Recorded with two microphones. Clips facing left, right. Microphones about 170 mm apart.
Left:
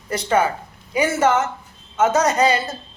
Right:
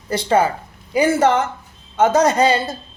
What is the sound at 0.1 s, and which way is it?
A man's voice, 30° right (ahead or behind).